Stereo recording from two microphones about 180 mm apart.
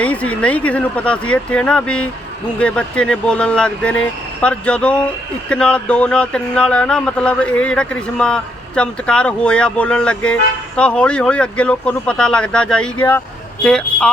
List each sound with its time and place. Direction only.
0.0 s speech: 5° left (ahead or behind)